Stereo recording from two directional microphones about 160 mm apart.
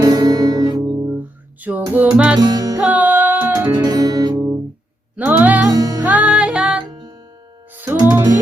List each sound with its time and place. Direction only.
0.0 s music: 25° right (ahead or behind)
1.6 s music: 10° right (ahead or behind)
2.4 s music: 25° right (ahead or behind)
2.8 s music: 10° right (ahead or behind)
3.8 s music: 25° right (ahead or behind)
5.1 s music: 10° right (ahead or behind)
5.6 s music: 20° right (ahead or behind)
6.0 s music: 10° right (ahead or behind)